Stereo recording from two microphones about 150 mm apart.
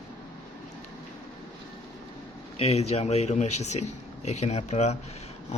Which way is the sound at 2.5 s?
45° left (ahead or behind).